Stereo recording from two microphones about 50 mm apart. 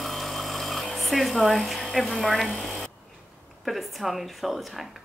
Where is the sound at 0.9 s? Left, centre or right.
Centre.